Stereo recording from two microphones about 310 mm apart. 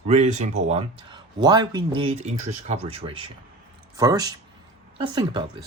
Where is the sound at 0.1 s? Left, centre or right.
Right.